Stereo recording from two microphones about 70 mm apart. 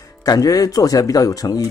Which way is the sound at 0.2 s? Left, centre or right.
Left.